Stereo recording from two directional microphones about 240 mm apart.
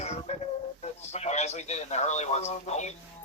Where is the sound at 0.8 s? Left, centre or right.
Left.